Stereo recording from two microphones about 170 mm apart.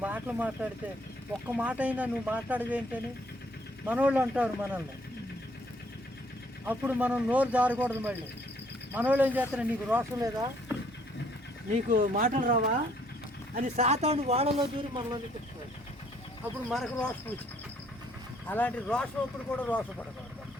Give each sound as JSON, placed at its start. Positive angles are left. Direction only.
{"t": 0.0, "sound": "speech", "side_deg": -10}
{"t": 6.7, "sound": "speech", "side_deg": -10}
{"t": 11.7, "sound": "speech", "side_deg": -50}
{"t": 13.7, "sound": "speech", "side_deg": -40}
{"t": 16.6, "sound": "speech", "side_deg": 5}
{"t": 18.4, "sound": "speech", "side_deg": 10}